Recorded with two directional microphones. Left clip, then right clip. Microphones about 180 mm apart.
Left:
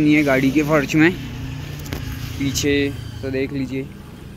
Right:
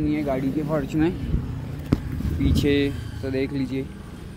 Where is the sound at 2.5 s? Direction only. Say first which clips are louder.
Left 3 dB; 10° right (ahead or behind).